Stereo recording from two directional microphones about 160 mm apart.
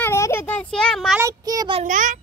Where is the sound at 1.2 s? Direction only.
20° right (ahead or behind).